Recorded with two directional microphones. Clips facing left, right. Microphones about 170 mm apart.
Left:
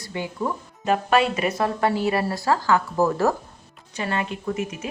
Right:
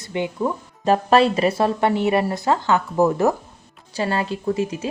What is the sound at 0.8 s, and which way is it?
Speech, 35° right (ahead or behind).